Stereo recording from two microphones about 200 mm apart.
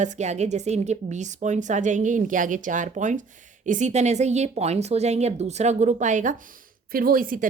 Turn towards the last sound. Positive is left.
turn(degrees=-45)  # may be behind; listen again after turning